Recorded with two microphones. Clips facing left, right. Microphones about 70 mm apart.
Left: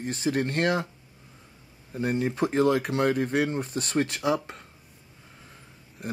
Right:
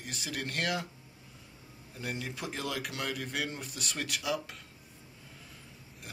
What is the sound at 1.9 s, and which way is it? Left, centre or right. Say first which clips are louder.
Speech: left 13 dB; left.